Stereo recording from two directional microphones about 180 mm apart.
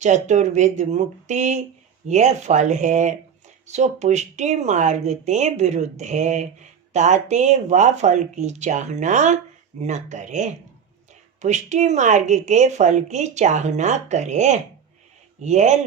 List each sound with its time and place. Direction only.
0.0 s a woman's voice: 40° right (ahead or behind)